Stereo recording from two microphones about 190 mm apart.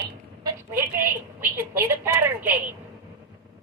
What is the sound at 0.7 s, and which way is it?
A woman's voice, 10° right (ahead or behind).